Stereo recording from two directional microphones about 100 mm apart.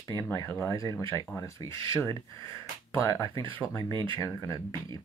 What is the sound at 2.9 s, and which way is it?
Speech, 30° left (ahead or behind).